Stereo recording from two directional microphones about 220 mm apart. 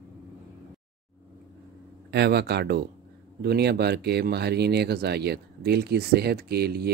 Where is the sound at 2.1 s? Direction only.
50° right (ahead or behind).